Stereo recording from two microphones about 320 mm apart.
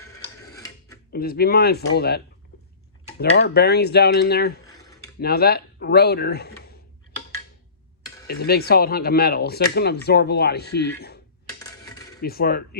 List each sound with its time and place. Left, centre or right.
0.5 s a sound: centre
1.1 s speech: left
3.3 s speech: left
8.3 s speech: left
11.6 s coin: centre
12.2 s speech: left